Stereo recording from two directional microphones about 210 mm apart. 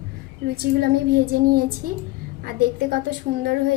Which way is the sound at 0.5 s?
45° right (ahead or behind).